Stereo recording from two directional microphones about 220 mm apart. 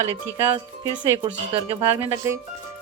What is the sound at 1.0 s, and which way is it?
Speech, 25° right (ahead or behind).